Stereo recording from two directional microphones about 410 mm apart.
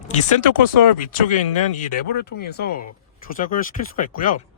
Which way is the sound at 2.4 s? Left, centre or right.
Left.